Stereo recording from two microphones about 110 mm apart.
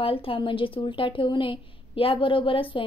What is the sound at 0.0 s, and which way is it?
A woman's voice, 55° left (ahead or behind).